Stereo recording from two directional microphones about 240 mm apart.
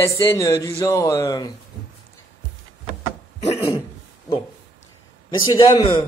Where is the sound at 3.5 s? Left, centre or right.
Centre.